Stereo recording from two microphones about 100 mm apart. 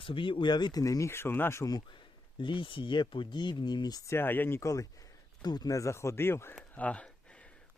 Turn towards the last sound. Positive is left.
turn(degrees=10)  # may be behind; listen again after turning